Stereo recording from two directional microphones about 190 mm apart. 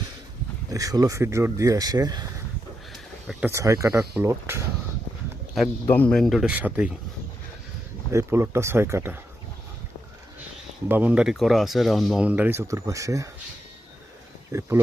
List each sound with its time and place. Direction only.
0.7 s speech: 20° right (ahead or behind)
2.9 s a sound: centre (ahead or behind)
3.5 s speech: 15° right (ahead or behind)
5.9 s speech: 5° left (ahead or behind)
8.1 s speech: 15° right (ahead or behind)
10.8 s speech: 10° right (ahead or behind)
14.5 s speech: 15° right (ahead or behind)